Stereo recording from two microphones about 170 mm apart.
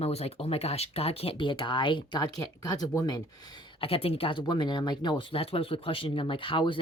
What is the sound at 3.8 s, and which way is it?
Speech, 35° left (ahead or behind).